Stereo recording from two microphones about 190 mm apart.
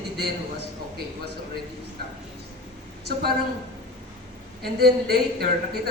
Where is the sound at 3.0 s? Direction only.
55° right (ahead or behind).